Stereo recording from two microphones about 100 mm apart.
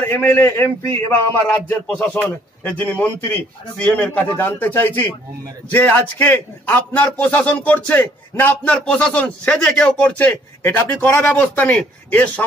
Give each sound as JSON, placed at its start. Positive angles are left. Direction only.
{"t": 0.0, "sound": "a man's voice", "side_deg": 20}
{"t": 1.7, "sound": "a man's voice", "side_deg": 10}